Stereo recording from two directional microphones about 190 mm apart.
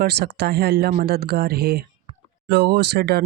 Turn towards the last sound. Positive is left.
turn(degrees=-55)  # may be behind; listen again after turning